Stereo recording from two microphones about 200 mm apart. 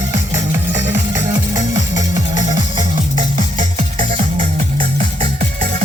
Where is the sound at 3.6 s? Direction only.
35° right (ahead or behind).